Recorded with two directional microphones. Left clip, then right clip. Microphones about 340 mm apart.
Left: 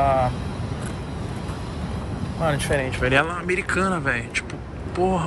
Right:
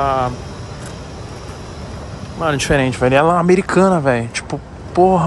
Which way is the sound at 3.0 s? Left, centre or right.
Centre.